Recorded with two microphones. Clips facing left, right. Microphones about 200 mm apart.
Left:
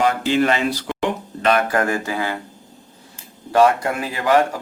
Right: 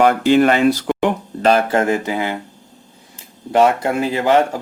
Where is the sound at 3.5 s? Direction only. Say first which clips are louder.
Right 1 dB; 25° right (ahead or behind).